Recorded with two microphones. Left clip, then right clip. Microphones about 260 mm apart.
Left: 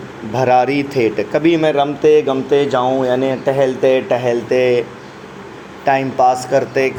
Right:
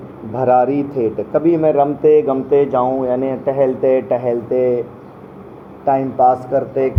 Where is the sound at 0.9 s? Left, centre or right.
Left.